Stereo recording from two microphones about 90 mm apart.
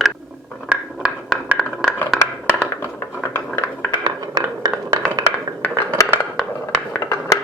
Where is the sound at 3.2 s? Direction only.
25° left (ahead or behind).